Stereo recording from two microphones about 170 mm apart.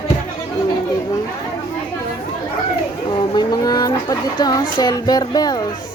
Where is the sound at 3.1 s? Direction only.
25° left (ahead or behind).